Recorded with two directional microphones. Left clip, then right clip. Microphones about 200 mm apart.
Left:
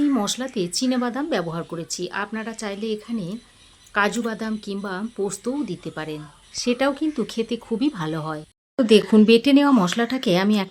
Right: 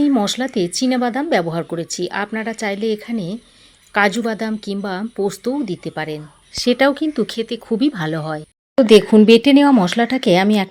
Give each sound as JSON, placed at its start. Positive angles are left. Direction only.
{"t": 0.0, "sound": "speech", "side_deg": -15}